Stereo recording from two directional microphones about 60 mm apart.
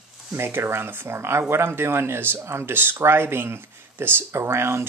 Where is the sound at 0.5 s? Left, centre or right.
Right.